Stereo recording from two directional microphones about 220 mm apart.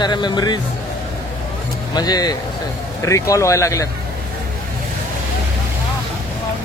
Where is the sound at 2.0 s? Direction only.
20° left (ahead or behind).